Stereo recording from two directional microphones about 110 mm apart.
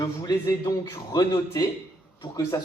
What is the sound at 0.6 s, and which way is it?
Speech, 40° left (ahead or behind).